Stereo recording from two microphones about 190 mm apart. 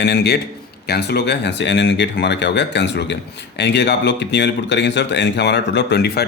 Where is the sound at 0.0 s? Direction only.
60° left (ahead or behind).